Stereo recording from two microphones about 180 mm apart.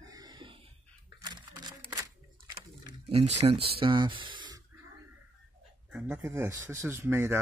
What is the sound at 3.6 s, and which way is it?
Speech, 30° right (ahead or behind).